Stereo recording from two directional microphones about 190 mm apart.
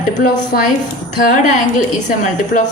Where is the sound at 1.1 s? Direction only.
40° left (ahead or behind).